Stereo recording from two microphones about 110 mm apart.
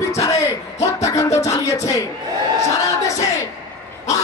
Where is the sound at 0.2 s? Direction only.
30° left (ahead or behind).